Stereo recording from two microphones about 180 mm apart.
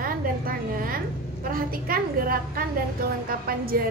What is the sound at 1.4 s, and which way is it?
A woman's voice, 55° right (ahead or behind).